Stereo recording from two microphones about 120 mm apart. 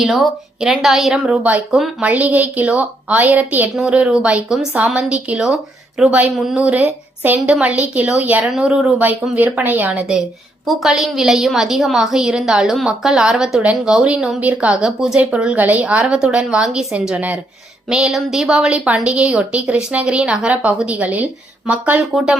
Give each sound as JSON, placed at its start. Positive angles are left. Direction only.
{"t": 0.0, "sound": "a woman's voice", "side_deg": 0}
{"t": 6.7, "sound": "a woman's voice", "side_deg": -15}
{"t": 10.7, "sound": "a woman's voice", "side_deg": 0}